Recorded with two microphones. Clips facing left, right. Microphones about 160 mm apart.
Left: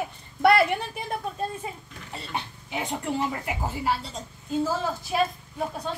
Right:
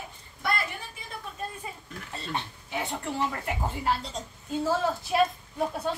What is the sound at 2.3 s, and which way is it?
Speech, 15° left (ahead or behind).